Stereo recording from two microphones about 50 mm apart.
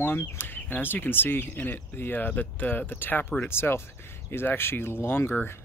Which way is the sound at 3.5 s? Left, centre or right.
Left.